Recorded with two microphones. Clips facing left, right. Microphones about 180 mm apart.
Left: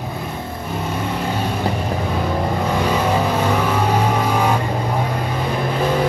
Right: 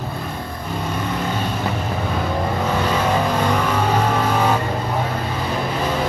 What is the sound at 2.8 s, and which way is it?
Vehicle, 10° left (ahead or behind).